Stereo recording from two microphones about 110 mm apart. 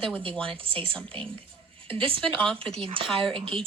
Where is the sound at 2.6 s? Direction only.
55° right (ahead or behind).